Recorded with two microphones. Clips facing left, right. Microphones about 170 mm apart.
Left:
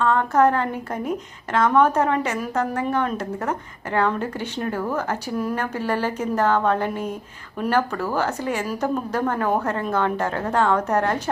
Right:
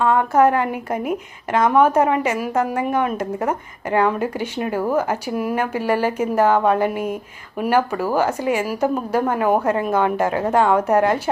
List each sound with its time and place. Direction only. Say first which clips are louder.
0.0 s speech: right 3 dB; 10° right (ahead or behind)